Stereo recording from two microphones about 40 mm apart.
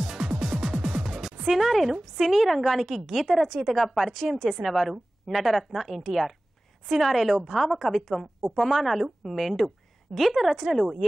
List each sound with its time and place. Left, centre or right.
0.0 s music: centre
0.7 s music: right
1.0 s music: centre
1.5 s a woman's voice: centre